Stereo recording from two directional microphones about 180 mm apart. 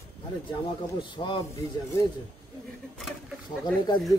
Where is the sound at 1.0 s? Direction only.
25° left (ahead or behind).